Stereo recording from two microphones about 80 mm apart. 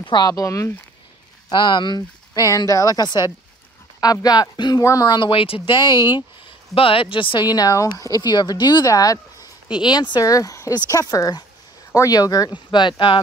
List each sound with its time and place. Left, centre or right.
0.0 s speech: left
0.3 s speech: left
1.5 s speech: left
5.0 s speech: left
7.0 s speech: left
7.4 s speech: left
9.8 s speech: left
10.2 s speech: left
12.5 s speech: left